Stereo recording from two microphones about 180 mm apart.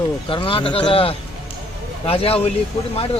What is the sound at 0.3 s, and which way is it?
Speech, 30° left (ahead or behind).